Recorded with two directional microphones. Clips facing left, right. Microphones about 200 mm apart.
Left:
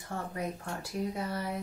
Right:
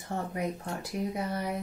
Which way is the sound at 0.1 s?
20° right (ahead or behind).